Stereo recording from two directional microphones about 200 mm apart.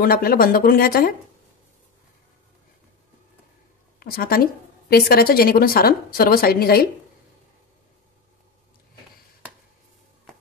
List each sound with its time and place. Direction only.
0.0 s a woman's voice: 45° left (ahead or behind)
4.0 s a woman's voice: 50° left (ahead or behind)